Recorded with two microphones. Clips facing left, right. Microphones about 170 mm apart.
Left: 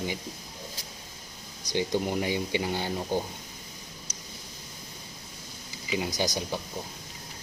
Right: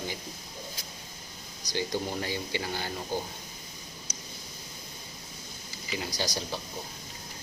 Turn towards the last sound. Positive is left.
turn(degrees=20)  # may be behind; listen again after turning